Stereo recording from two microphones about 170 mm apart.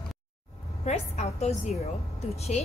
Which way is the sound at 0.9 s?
40° left (ahead or behind).